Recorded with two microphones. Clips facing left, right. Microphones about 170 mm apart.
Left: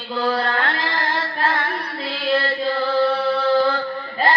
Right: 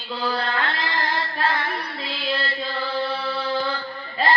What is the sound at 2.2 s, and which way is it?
Chant, 50° left (ahead or behind).